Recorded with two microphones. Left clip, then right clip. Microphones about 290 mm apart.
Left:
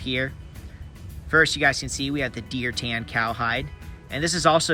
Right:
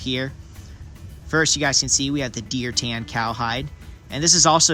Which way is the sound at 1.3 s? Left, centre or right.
Centre.